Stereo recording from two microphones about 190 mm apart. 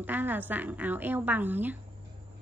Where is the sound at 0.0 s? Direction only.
10° right (ahead or behind).